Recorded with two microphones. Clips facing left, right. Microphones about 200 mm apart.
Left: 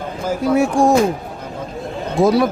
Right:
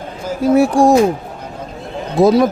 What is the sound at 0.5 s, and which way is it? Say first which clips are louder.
Speech: right 4 dB; 35° right (ahead or behind).